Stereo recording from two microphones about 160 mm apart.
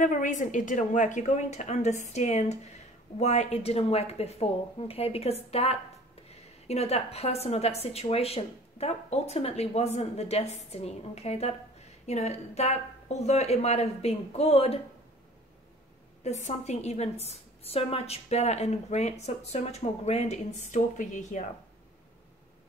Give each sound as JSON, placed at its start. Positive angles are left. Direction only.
{"t": 0.0, "sound": "a woman's voice", "side_deg": 55}
{"t": 16.3, "sound": "a woman's voice", "side_deg": 45}